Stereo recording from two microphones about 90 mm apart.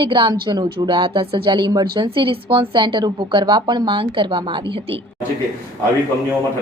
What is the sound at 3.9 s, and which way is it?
Speech, 70° right (ahead or behind).